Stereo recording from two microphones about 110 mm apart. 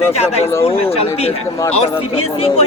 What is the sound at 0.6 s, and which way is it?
Speech, 65° left (ahead or behind).